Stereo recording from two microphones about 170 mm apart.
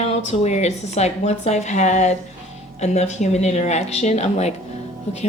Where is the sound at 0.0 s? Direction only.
40° left (ahead or behind).